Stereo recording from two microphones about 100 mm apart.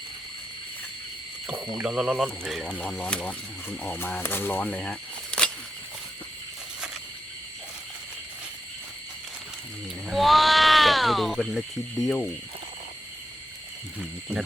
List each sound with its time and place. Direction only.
1.8 s speech: 5° right (ahead or behind)
10.1 s speech: centre (ahead or behind)
14.0 s speech: 5° right (ahead or behind)